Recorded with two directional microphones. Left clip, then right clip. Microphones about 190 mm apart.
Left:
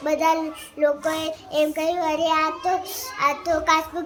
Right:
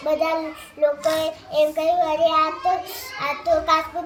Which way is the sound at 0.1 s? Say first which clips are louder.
Left 1 dB; 15° left (ahead or behind).